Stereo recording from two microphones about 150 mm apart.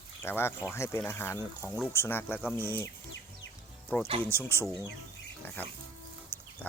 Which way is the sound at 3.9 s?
10° left (ahead or behind).